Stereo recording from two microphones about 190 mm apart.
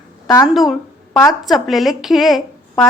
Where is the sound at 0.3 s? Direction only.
15° left (ahead or behind).